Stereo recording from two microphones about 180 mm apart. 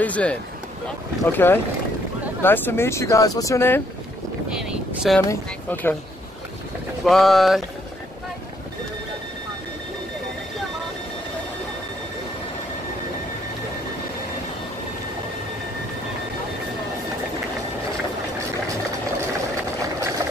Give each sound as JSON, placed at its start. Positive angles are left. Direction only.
{"t": 0.0, "sound": "speech", "side_deg": 5}
{"t": 4.5, "sound": "speech", "side_deg": -5}
{"t": 5.3, "sound": "speech", "side_deg": 10}
{"t": 7.1, "sound": "speech", "side_deg": 0}